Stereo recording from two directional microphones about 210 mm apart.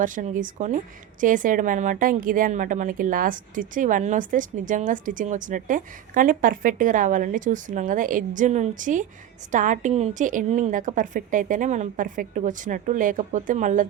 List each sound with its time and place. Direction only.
0.0 s a woman's voice: 40° right (ahead or behind)